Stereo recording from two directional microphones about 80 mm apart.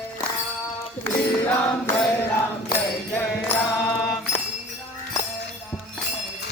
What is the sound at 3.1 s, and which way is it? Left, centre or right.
Music, left.